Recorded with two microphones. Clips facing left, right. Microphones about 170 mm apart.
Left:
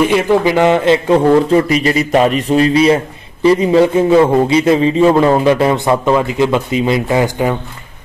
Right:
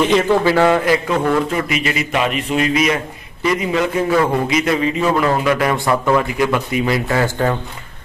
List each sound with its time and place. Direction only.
0.0 s a man's voice: 10° left (ahead or behind)